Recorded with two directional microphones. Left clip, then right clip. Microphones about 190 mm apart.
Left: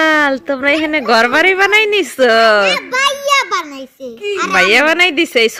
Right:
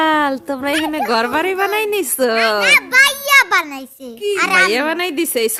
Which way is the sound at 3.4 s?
10° right (ahead or behind).